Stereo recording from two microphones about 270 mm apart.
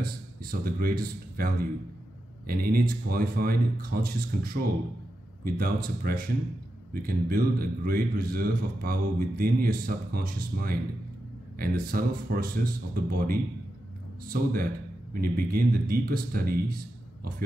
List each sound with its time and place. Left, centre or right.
0.0 s a man's voice: right